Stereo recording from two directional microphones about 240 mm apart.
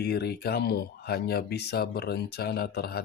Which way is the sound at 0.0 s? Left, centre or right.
Left.